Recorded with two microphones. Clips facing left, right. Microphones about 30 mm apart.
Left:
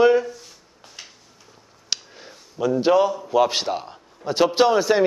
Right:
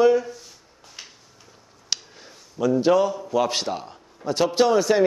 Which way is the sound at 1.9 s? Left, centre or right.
Centre.